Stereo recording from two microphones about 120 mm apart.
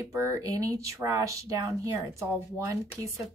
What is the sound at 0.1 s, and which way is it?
Speech, 25° right (ahead or behind).